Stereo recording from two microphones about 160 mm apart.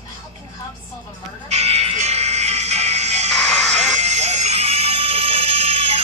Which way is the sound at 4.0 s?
45° right (ahead or behind).